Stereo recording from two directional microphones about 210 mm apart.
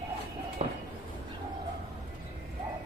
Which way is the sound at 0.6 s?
30° right (ahead or behind).